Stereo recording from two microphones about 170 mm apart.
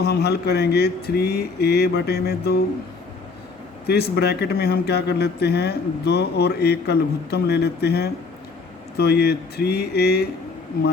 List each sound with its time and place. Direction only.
0.0 s speech: 70° left (ahead or behind)
3.8 s speech: 70° left (ahead or behind)